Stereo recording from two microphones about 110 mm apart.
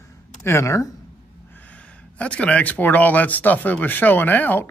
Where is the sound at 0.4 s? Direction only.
25° left (ahead or behind).